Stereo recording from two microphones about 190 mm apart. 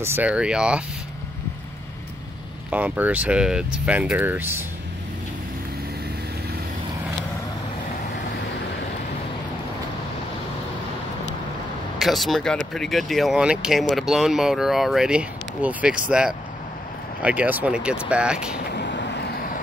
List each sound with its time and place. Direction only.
0.0 s speech: 10° right (ahead or behind)
2.7 s speech: 10° right (ahead or behind)
12.0 s speech: centre (ahead or behind)
18.8 s vehicle: 65° left (ahead or behind)